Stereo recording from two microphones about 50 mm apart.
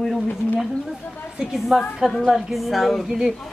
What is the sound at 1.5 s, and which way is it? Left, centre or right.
Speech, centre.